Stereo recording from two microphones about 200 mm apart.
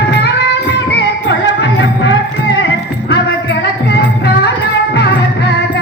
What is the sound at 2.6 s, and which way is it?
Music, 60° left (ahead or behind).